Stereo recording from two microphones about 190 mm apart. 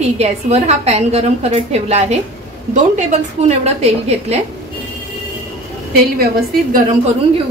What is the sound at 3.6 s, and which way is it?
Speech, 35° right (ahead or behind).